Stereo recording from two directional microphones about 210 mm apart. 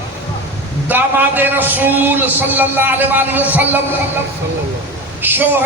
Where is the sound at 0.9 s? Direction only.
10° right (ahead or behind).